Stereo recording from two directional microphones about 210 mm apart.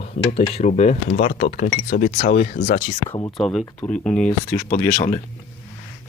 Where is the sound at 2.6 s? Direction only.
50° left (ahead or behind).